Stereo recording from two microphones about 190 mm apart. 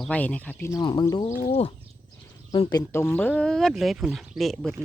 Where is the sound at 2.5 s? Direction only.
20° left (ahead or behind).